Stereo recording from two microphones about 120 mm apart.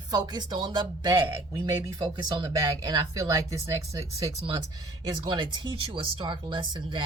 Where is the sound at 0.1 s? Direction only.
35° right (ahead or behind).